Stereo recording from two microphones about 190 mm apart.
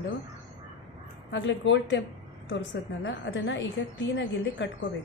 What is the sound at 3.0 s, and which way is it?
A woman's voice, 70° left (ahead or behind).